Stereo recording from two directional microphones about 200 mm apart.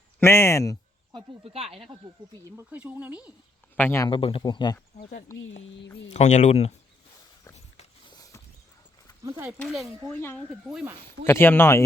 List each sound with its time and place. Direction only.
0.2 s speech: 10° left (ahead or behind)
1.1 s speech: 30° right (ahead or behind); by 3.3 s 5° right (ahead or behind)
3.8 s speech: 10° left (ahead or behind)
4.1 s speech: 25° left (ahead or behind)
5.4 s speech: 65° left (ahead or behind)
6.1 s speech: 35° left (ahead or behind)
8.1 s rodents: 15° left (ahead or behind)
9.2 s speech: 15° right (ahead or behind)
9.6 s speech: 5° left (ahead or behind)
10.5 s speech: centre (ahead or behind)
11.3 s speech: 10° left (ahead or behind)